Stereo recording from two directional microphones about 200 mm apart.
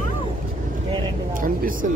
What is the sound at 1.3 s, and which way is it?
Speech, 45° right (ahead or behind).